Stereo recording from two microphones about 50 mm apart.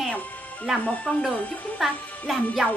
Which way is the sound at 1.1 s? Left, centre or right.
Centre.